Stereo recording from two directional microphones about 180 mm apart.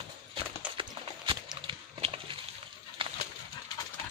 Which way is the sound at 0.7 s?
30° right (ahead or behind).